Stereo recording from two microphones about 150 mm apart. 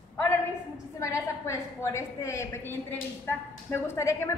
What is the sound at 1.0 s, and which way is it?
A woman's voice, 20° left (ahead or behind).